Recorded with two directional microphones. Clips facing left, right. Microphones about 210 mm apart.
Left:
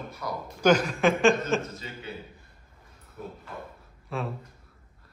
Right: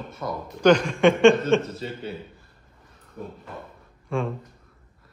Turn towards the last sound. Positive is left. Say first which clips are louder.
# right 6 dB
turn(degrees=5)  # may be behind; listen again after turning